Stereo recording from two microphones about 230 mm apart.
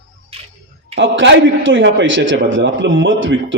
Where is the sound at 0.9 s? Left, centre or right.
Right.